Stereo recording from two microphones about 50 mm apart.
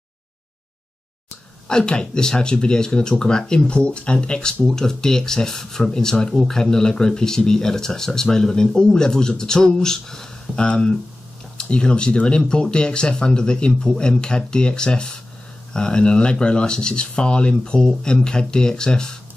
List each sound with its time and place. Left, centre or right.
1.7 s speech: centre